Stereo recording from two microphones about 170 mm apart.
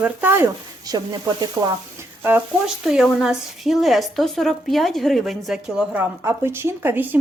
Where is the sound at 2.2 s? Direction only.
10° right (ahead or behind).